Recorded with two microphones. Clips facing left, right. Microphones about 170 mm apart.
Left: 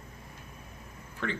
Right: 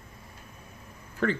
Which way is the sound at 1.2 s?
45° right (ahead or behind).